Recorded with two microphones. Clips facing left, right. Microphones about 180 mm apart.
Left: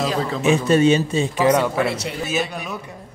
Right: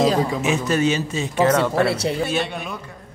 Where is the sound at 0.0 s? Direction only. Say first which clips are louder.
Right 4 dB; 15° right (ahead or behind).